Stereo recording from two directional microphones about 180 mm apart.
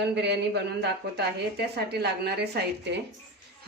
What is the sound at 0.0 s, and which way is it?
A woman's voice, 70° right (ahead or behind).